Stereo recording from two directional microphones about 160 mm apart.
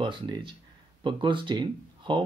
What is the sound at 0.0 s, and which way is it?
Speech, 30° right (ahead or behind).